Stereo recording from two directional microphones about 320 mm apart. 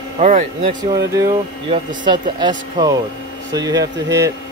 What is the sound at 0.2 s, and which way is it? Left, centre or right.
Speech, right.